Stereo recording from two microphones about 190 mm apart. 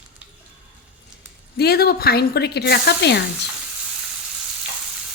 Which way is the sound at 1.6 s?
55° left (ahead or behind).